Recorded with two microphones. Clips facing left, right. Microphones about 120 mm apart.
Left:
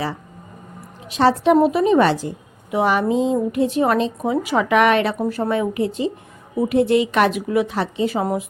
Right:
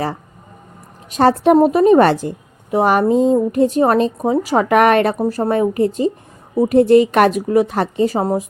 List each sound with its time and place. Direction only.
1.1 s a woman's voice: 45° right (ahead or behind)